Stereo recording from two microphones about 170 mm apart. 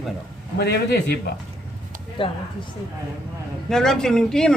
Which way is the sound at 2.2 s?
30° left (ahead or behind).